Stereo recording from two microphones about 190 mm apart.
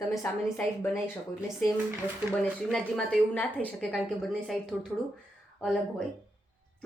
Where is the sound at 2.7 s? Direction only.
Centre (ahead or behind).